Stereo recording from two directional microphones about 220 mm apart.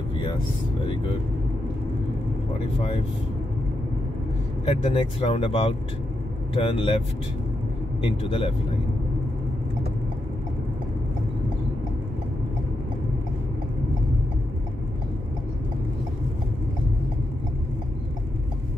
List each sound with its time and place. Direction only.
4.6 s speech: 25° left (ahead or behind)
8.0 s speech: 25° left (ahead or behind)